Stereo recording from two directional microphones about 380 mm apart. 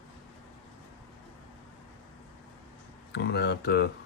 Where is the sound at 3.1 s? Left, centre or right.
Left.